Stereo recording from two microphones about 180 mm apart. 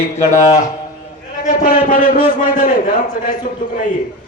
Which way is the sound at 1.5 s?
55° left (ahead or behind).